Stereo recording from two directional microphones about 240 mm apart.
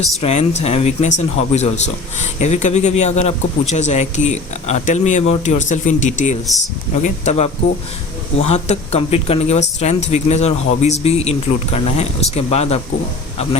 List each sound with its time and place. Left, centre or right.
0.0 s speech: left